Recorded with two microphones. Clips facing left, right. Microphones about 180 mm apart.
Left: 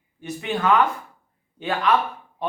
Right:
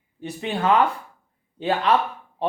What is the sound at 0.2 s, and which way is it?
Speech, 30° right (ahead or behind).